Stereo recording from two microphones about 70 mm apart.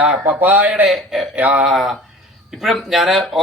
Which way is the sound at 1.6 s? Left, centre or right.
Centre.